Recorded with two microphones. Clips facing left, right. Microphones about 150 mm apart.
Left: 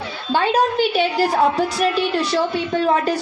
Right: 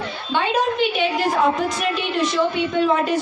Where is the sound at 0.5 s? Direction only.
35° left (ahead or behind).